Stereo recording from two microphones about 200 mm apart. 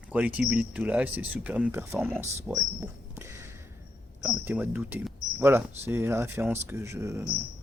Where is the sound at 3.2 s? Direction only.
15° right (ahead or behind).